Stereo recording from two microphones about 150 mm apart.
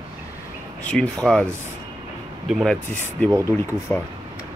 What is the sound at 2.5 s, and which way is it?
Speech, centre (ahead or behind).